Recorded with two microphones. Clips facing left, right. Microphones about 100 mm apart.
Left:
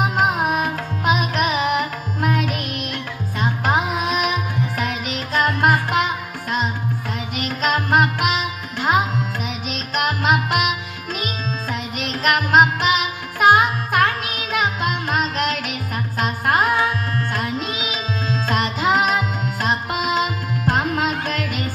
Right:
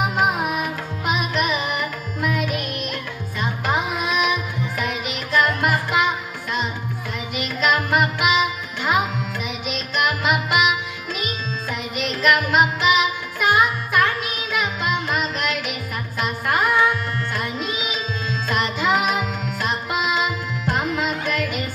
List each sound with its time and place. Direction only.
0.0 s carnatic music: 50° left (ahead or behind)
7.3 s music: 45° left (ahead or behind)
16.2 s tabla: 45° left (ahead or behind)
18.5 s music: 45° left (ahead or behind)